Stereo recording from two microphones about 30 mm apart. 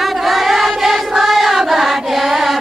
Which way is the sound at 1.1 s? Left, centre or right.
Centre.